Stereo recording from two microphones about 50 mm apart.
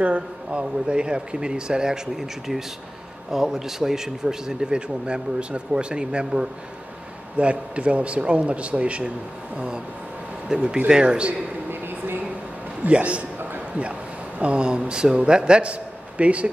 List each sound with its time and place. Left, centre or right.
0.0 s a man's voice: right
10.5 s a man's voice: centre
12.8 s a man's voice: right
14.4 s a man's voice: right